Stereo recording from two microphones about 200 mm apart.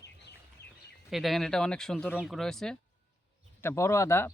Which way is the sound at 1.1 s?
Centre (ahead or behind).